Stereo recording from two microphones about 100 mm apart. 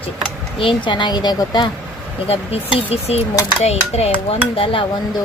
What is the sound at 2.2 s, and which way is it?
Speech, 80° left.